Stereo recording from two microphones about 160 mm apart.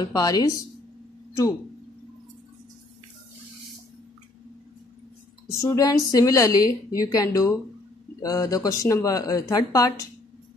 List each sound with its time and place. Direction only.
0.0 s a woman's voice: 20° left (ahead or behind)
5.5 s a woman's voice: 20° left (ahead or behind)